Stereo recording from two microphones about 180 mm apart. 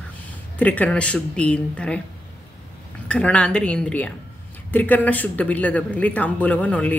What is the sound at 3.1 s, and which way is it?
A woman's voice, 5° left (ahead or behind).